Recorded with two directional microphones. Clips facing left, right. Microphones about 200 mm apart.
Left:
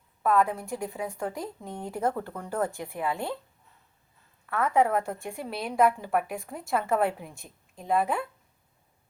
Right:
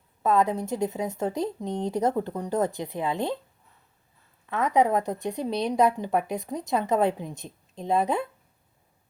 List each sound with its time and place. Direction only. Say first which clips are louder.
0.2 s a woman's voice: right 2 dB; 20° right (ahead or behind)
4.4 s a woman's voice: right 2 dB; 20° right (ahead or behind)